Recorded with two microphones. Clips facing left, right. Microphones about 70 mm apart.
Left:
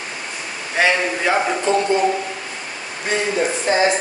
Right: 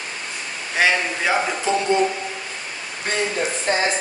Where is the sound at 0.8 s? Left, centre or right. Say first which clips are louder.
Left 2 dB; centre.